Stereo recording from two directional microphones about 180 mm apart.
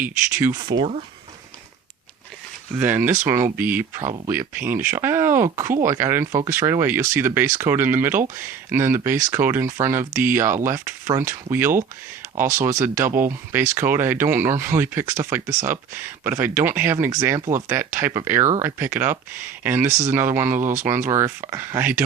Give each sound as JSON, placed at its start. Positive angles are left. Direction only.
{"t": 0.0, "sound": "speech", "side_deg": -15}
{"t": 0.6, "sound": "speech", "side_deg": -25}
{"t": 2.7, "sound": "speech", "side_deg": -10}